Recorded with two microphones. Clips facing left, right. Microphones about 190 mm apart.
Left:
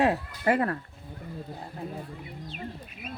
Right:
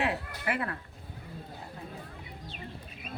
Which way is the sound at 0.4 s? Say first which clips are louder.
Left 9 dB; 40° left (ahead or behind).